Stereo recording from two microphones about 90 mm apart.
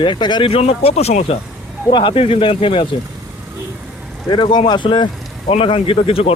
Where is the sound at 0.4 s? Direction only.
90° left.